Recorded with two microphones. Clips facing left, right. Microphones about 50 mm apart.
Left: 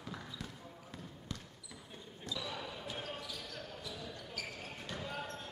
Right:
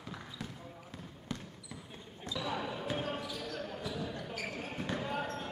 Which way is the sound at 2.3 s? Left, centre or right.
Right.